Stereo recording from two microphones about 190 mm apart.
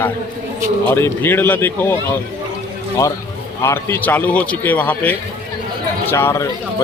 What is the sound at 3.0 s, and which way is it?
A man's voice, 15° left (ahead or behind).